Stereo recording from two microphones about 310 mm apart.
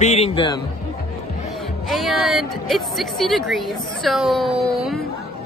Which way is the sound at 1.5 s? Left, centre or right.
Centre.